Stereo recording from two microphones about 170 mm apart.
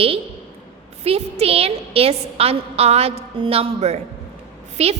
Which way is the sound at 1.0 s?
35° right (ahead or behind).